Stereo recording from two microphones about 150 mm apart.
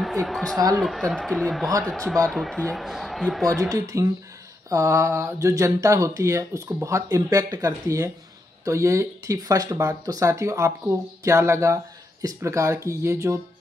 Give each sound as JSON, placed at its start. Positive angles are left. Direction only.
{"t": 0.0, "sound": "a man's voice", "side_deg": 0}
{"t": 3.4, "sound": "speech", "side_deg": -25}